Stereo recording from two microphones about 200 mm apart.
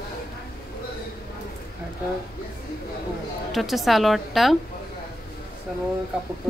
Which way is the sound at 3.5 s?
Centre (ahead or behind).